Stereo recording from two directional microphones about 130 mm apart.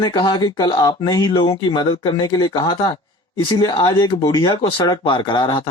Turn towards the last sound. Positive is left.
turn(degrees=35)  # may be behind; listen again after turning